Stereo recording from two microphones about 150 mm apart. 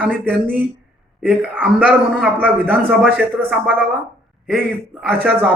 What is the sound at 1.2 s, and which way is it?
Speech, 10° right (ahead or behind).